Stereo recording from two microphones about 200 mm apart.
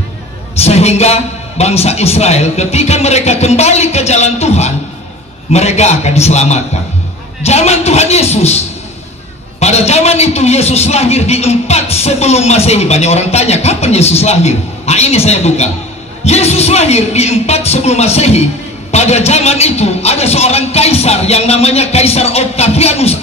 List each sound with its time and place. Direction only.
0.6 s a man's voice: 30° left (ahead or behind)